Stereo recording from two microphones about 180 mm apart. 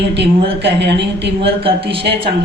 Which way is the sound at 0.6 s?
70° right (ahead or behind).